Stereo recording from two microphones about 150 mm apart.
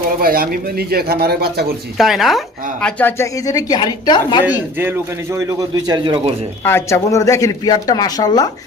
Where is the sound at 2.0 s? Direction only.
Centre (ahead or behind).